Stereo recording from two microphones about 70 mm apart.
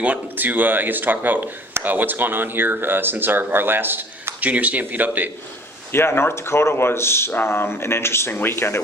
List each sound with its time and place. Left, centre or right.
0.0 s speech: right
5.9 s speech: left